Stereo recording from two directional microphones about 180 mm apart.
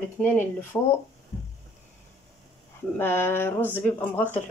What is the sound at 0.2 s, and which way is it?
Speech, 10° left (ahead or behind).